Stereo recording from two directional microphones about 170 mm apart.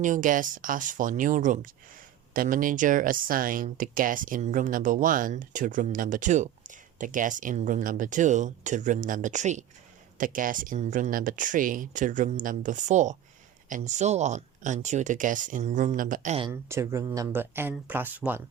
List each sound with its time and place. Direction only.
0.0 s speech: 50° right (ahead or behind)
16.5 s speech: 15° right (ahead or behind)